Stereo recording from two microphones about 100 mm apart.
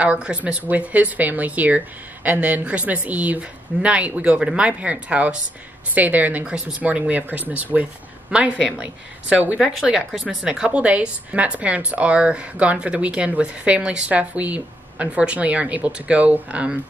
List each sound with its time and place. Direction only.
0.0 s a woman's voice: 10° right (ahead or behind)
9.6 s a woman's voice: 5° right (ahead or behind)